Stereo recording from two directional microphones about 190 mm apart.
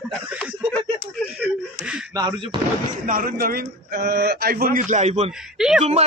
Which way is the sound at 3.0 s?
45° right (ahead or behind).